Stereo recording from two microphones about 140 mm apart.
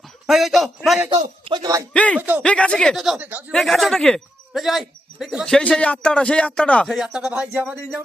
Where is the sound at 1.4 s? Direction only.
30° right (ahead or behind).